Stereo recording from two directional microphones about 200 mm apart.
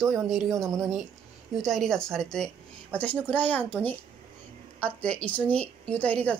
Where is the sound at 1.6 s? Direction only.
Centre (ahead or behind).